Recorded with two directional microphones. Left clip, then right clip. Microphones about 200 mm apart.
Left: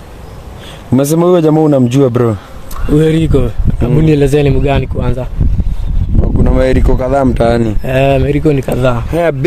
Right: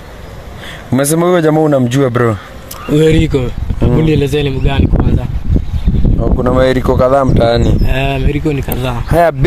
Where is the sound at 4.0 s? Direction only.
55° left (ahead or behind).